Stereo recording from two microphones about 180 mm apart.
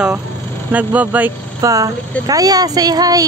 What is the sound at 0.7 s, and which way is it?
Speech, 10° right (ahead or behind).